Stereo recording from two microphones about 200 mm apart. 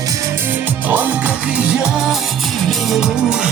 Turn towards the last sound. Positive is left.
turn(degrees=-5)  # may be behind; listen again after turning